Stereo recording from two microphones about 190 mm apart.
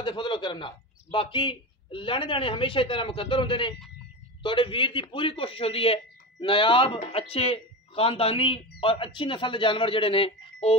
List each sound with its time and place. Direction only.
0.0 s a man's voice: 25° left (ahead or behind)